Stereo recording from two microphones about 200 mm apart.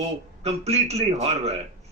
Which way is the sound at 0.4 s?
30° right (ahead or behind).